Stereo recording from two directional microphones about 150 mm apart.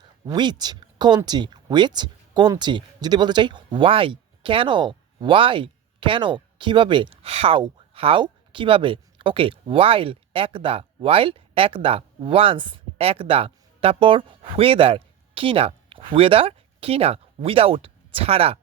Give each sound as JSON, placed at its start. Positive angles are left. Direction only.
{"t": 0.3, "sound": "speech", "side_deg": -25}